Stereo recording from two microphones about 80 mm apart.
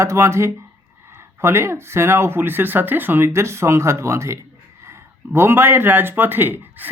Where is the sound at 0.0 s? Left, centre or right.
Right.